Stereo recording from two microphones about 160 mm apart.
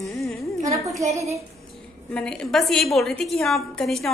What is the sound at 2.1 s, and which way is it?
A woman's voice, 5° left (ahead or behind).